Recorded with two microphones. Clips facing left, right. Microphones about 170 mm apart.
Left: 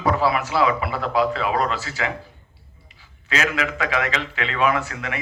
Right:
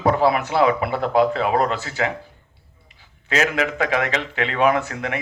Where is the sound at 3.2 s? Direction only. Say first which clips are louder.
Right 3 dB; 45° right (ahead or behind).